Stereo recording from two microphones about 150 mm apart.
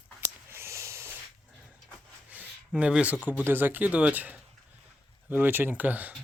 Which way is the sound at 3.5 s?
15° right (ahead or behind).